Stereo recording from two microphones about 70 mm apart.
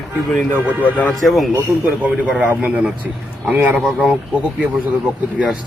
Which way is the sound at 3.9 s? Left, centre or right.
Centre.